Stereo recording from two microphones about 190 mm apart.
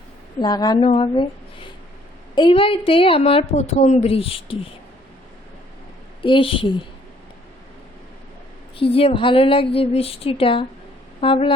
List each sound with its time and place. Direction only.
0.3 s a woman's voice: 20° left (ahead or behind)
6.2 s a woman's voice: 25° left (ahead or behind)
8.8 s a woman's voice: 30° left (ahead or behind)